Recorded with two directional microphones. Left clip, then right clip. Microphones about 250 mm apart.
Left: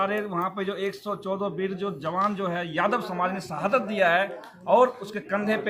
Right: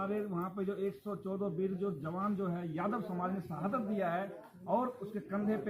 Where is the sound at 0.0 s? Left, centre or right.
Left.